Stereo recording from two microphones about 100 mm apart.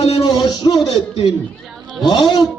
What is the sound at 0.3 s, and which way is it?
Music, 45° left (ahead or behind).